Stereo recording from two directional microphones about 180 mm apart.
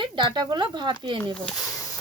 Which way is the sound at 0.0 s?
25° right (ahead or behind).